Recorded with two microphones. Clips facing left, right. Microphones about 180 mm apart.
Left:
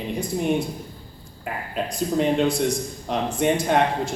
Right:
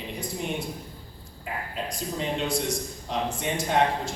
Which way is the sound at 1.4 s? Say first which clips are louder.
Left 5 dB; 60° left (ahead or behind).